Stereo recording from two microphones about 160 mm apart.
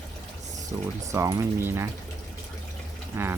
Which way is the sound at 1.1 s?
20° right (ahead or behind).